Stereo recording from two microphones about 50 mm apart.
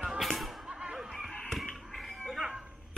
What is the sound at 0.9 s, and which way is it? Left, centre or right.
Chicken, centre.